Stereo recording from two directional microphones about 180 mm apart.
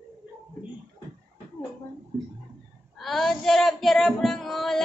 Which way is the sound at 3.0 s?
Centre (ahead or behind).